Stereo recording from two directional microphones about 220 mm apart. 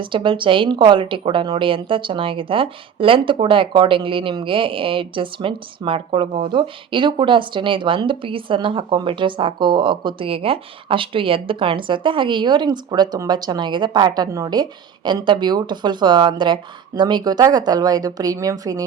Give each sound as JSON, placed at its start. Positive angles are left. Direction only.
{"t": 0.0, "sound": "a woman's voice", "side_deg": -20}